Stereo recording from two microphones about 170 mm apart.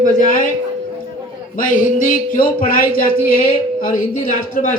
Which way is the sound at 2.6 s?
55° left (ahead or behind).